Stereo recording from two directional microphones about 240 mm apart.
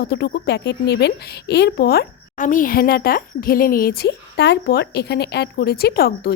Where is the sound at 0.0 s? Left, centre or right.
Left.